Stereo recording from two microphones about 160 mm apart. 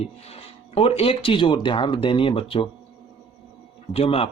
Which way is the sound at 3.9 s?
35° left (ahead or behind).